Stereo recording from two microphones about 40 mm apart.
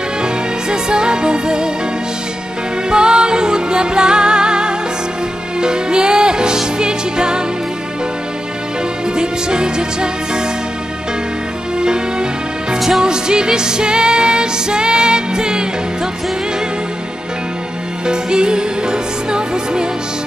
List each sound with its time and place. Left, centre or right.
0.2 s music: right
2.9 s music: right
9.1 s music: right
11.8 s music: right
12.7 s music: centre
13.0 s music: right
18.0 s music: centre